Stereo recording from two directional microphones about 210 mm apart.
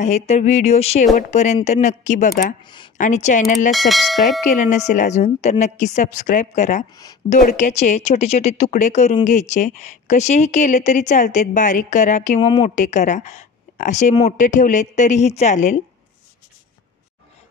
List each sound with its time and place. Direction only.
0.0 s speech: 30° left (ahead or behind)
2.6 s speech: 20° left (ahead or behind)
3.0 s speech: 35° left (ahead or behind)
3.7 s speech: centre (ahead or behind)
4.5 s speech: 35° left (ahead or behind)